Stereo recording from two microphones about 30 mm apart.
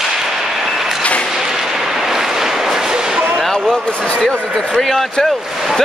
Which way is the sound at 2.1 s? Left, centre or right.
Centre.